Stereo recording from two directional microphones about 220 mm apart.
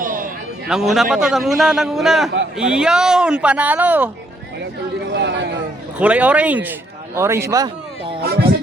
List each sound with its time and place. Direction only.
0.0 s a sound: 40° right (ahead or behind)
0.7 s speech: centre (ahead or behind)
5.1 s speech: 50° right (ahead or behind)
6.0 s speech: 5° right (ahead or behind)
8.2 s speech: 45° right (ahead or behind)